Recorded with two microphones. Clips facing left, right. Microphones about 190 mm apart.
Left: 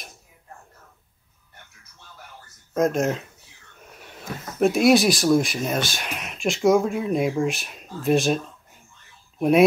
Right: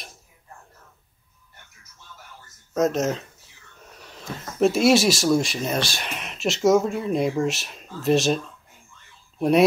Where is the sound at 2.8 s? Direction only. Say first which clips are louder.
Even; centre (ahead or behind).